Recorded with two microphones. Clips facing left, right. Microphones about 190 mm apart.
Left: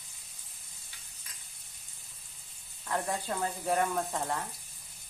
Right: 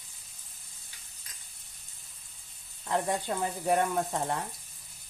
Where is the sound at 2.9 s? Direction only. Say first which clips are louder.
Right 3 dB; 20° right (ahead or behind).